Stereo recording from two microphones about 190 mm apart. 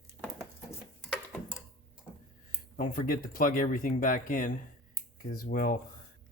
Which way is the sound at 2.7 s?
45° left (ahead or behind).